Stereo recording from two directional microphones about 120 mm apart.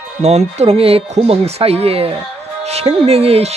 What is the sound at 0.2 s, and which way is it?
Speech, 65° right (ahead or behind).